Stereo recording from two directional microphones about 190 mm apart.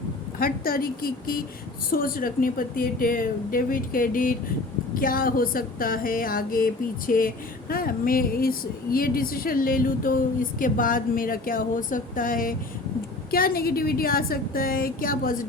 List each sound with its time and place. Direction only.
0.3 s speech: 50° left (ahead or behind)